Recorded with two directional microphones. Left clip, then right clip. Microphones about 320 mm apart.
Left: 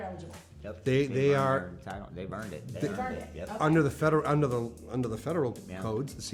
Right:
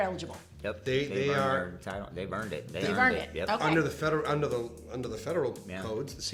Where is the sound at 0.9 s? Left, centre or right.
Left.